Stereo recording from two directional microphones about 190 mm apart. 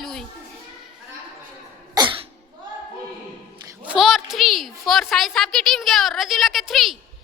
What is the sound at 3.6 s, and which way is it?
A woman's voice, 5° right (ahead or behind).